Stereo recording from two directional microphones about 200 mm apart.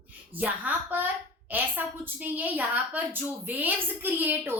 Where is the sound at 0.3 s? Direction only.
10° right (ahead or behind).